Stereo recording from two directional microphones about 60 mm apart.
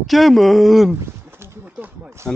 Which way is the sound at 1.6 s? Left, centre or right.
Right.